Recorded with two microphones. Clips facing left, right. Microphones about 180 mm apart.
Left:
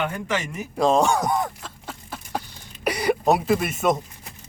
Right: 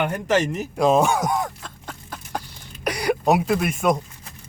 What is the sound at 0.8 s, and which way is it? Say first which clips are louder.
Chicken: right 1 dB; 5° right (ahead or behind).